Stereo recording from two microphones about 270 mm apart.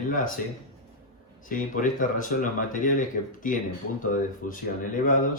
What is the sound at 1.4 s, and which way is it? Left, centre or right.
Speech, left.